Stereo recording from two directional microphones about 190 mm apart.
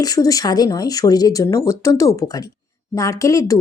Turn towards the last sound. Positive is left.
turn(degrees=15)  # may be behind; listen again after turning